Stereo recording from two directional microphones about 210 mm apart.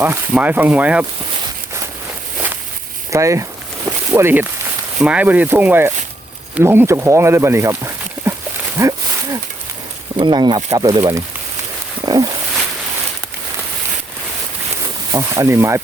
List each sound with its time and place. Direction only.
0.0 s speech: 10° right (ahead or behind)
3.1 s speech: 15° right (ahead or behind)
8.8 s a sound: 15° right (ahead or behind)
10.2 s speech: 20° right (ahead or behind)
12.0 s wild animals: 20° right (ahead or behind)
15.1 s speech: 15° right (ahead or behind)